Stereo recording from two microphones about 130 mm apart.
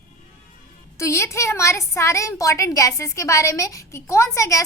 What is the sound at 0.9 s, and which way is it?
A woman's voice, 20° left (ahead or behind).